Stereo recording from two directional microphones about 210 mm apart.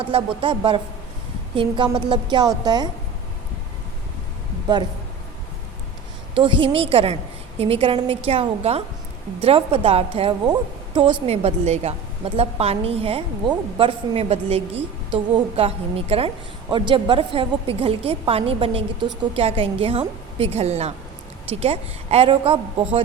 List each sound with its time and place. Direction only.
0.0 s a woman's voice: 25° right (ahead or behind)
6.3 s a woman's voice: 25° right (ahead or behind)
11.3 s a woman's voice: 30° right (ahead or behind)